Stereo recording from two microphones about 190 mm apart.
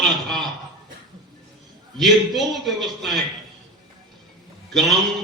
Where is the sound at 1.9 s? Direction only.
Centre (ahead or behind).